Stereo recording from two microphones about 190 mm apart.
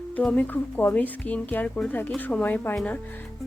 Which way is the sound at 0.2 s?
10° left (ahead or behind).